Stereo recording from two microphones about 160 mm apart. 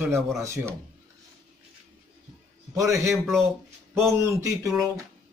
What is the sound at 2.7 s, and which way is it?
A man's voice, 20° right (ahead or behind).